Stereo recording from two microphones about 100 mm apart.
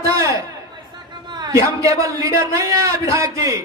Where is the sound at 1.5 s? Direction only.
30° right (ahead or behind).